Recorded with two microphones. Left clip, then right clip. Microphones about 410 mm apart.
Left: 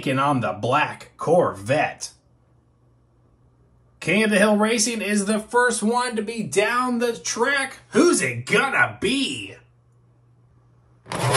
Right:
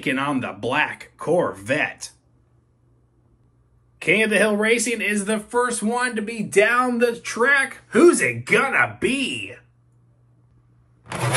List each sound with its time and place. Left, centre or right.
0.0 s speech: centre
4.0 s speech: centre
5.3 s speech: centre